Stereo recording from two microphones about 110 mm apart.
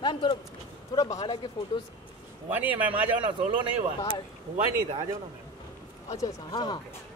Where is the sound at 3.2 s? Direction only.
50° right (ahead or behind).